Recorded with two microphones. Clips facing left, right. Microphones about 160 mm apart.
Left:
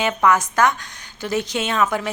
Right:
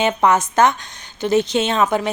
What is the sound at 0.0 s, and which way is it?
A woman's voice, 25° right (ahead or behind).